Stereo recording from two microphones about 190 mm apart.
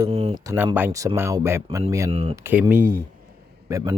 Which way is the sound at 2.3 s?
10° right (ahead or behind).